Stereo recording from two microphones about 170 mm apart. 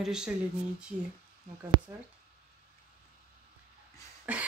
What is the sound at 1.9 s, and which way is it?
Speech, 10° right (ahead or behind).